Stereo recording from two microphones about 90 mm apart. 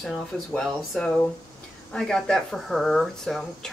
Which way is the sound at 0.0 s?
Centre (ahead or behind).